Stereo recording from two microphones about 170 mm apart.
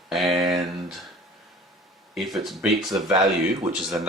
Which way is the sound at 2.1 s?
5° right (ahead or behind).